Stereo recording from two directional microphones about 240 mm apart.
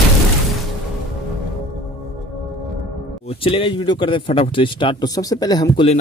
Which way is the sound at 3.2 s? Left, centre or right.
Left.